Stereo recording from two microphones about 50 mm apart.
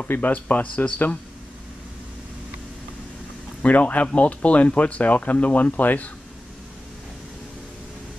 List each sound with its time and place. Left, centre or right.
0.1 s speech: left
3.6 s speech: left